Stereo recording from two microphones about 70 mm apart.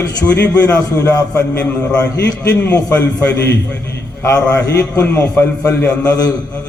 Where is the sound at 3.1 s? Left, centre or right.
Left.